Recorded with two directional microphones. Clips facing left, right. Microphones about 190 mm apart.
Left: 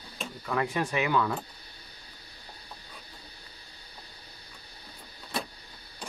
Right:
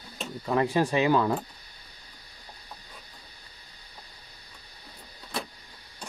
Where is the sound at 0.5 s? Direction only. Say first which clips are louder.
Right 5 dB; 30° right (ahead or behind).